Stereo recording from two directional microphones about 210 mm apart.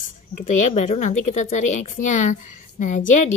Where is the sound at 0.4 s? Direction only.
35° left (ahead or behind).